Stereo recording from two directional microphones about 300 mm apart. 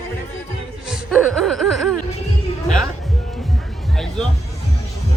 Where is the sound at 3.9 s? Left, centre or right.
Centre.